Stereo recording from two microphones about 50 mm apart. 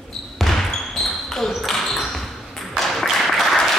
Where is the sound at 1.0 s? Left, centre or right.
Centre.